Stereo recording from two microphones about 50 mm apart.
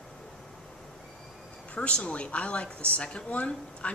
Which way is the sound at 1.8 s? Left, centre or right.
Left.